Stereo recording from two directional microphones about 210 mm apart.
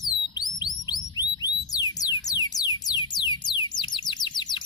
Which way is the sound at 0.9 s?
20° left (ahead or behind).